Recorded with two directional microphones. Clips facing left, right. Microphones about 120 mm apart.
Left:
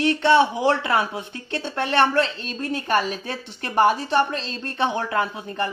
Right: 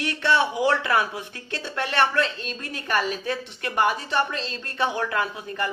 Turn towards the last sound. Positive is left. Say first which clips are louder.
# left 2 dB
turn(degrees=25)  # may be behind; listen again after turning